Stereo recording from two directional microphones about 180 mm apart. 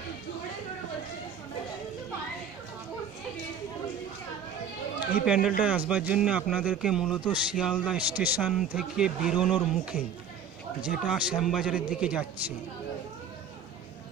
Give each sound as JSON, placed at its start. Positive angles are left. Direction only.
{"t": 5.2, "sound": "a man's voice", "side_deg": -5}